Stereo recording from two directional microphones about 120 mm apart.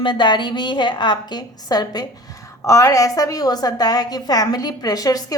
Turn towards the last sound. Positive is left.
turn(degrees=30)  # may be behind; listen again after turning